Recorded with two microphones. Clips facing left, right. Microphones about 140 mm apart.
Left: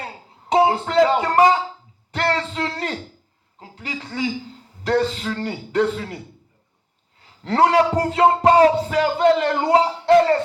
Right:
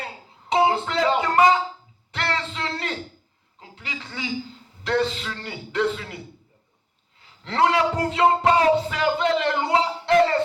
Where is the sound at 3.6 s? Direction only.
40° left (ahead or behind).